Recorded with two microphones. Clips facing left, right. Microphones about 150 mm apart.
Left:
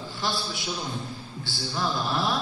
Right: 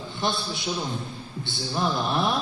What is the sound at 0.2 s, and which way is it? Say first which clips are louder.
A man's voice: right 3 dB; 20° right (ahead or behind).